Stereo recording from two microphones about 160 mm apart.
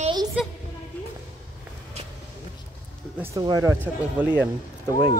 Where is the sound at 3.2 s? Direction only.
20° right (ahead or behind).